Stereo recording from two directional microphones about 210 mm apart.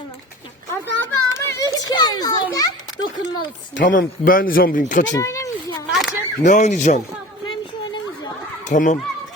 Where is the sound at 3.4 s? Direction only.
60° left (ahead or behind).